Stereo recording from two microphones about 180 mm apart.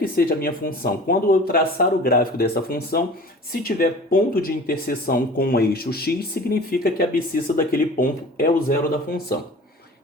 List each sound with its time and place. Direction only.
0.0 s speech: 55° left (ahead or behind)